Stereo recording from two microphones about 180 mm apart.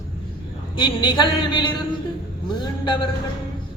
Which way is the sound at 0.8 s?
25° left (ahead or behind).